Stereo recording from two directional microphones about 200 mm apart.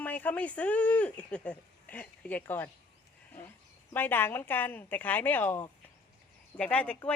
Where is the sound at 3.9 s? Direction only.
10° left (ahead or behind).